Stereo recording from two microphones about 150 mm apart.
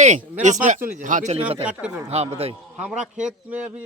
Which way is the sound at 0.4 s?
55° right (ahead or behind).